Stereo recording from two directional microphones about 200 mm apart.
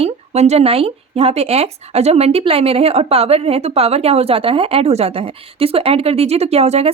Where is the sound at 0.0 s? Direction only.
35° right (ahead or behind).